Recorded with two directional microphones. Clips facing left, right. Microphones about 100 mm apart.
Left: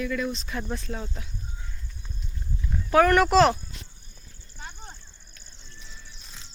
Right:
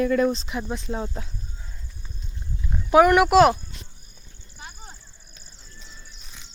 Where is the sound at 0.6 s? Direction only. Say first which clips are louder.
Right 4 dB; 15° right (ahead or behind).